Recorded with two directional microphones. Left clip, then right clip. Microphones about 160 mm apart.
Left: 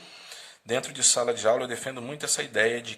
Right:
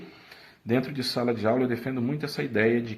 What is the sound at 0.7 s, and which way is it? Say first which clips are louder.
Speech: left 2 dB; 35° left (ahead or behind).